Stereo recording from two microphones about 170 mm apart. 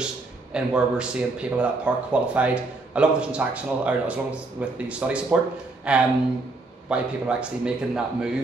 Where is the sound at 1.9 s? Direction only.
5° right (ahead or behind).